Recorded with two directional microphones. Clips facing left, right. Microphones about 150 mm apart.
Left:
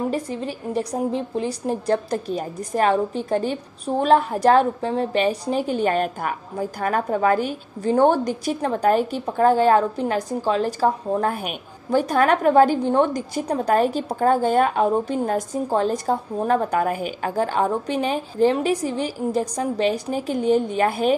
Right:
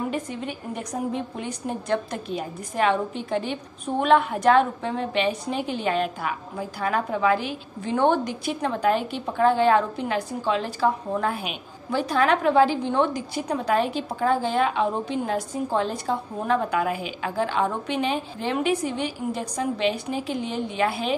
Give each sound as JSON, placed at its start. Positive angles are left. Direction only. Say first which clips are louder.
{"t": 0.1, "sound": "a woman's voice", "louder": "left 4 dB", "side_deg": 35}